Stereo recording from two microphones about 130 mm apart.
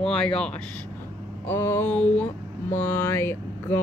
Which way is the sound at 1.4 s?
20° left (ahead or behind).